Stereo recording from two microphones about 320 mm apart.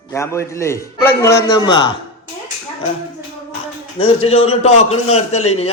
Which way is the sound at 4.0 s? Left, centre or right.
Centre.